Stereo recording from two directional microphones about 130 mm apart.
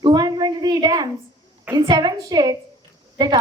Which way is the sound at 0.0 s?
35° right (ahead or behind).